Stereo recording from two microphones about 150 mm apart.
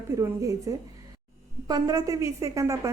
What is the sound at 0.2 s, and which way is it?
A woman's voice, 20° right (ahead or behind).